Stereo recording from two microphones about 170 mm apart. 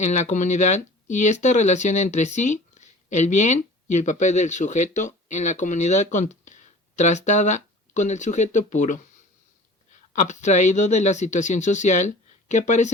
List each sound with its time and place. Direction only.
0.0 s speech: 45° left (ahead or behind)
10.2 s speech: 45° left (ahead or behind)